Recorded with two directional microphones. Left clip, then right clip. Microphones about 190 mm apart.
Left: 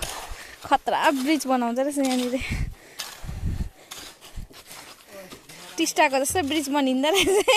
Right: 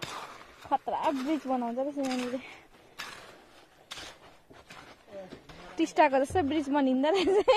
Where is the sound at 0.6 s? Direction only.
35° left (ahead or behind).